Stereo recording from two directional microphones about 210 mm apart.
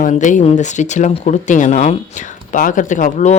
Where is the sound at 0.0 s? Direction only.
35° left (ahead or behind).